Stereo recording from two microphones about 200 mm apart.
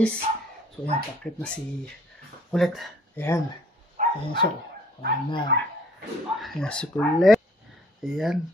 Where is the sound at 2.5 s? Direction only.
Centre (ahead or behind).